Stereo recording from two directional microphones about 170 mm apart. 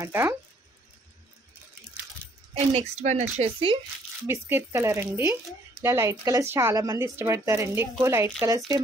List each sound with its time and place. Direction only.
0.0 s speech: 15° right (ahead or behind)
2.7 s speech: 40° right (ahead or behind)
4.3 s speech: 15° right (ahead or behind)